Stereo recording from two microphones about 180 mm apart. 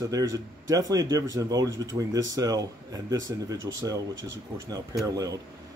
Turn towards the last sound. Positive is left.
turn(degrees=-20)  # may be behind; listen again after turning